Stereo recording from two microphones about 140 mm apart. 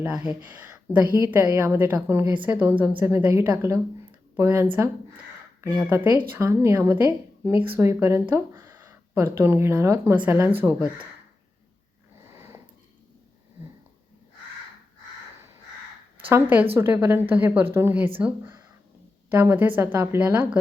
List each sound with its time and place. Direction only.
0.0 s speech: 10° right (ahead or behind)
12.2 s sniff: 20° right (ahead or behind)
16.2 s speech: 15° right (ahead or behind)